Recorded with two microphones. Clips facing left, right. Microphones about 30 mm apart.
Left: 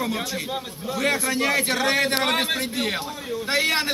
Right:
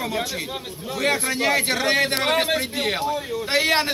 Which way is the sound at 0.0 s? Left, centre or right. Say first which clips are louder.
Right 1 dB; centre.